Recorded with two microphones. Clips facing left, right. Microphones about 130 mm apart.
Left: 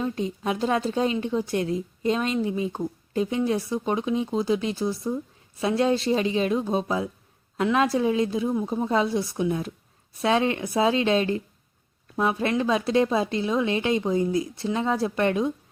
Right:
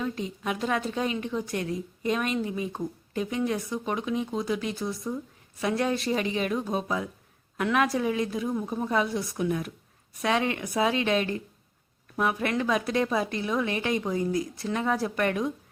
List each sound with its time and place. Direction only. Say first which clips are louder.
0.0 s speech: left 4 dB; 30° left (ahead or behind)